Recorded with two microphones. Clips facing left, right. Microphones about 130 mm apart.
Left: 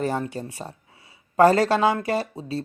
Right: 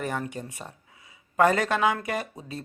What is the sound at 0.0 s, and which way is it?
Speech, 30° left (ahead or behind).